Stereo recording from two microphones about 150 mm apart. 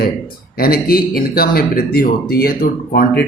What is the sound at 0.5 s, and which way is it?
Speech, 80° left.